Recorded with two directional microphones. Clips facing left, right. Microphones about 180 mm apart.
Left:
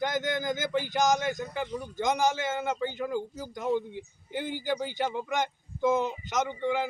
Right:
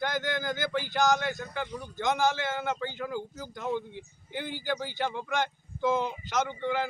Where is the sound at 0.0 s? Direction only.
20° left (ahead or behind).